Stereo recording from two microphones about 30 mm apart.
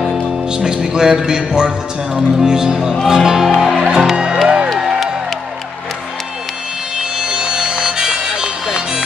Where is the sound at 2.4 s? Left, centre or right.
Centre.